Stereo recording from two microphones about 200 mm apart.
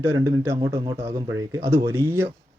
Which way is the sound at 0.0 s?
15° right (ahead or behind).